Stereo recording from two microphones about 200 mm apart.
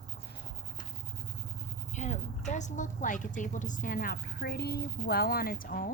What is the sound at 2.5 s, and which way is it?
A woman's voice, 35° left (ahead or behind).